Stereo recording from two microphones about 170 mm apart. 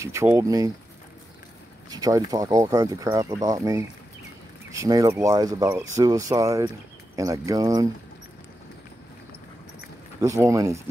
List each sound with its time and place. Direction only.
0.0 s speech: 15° right (ahead or behind)
1.9 s speech: 20° right (ahead or behind)
10.2 s speech: 15° right (ahead or behind)